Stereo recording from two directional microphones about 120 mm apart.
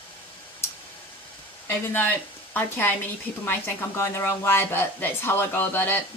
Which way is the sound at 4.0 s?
20° left (ahead or behind).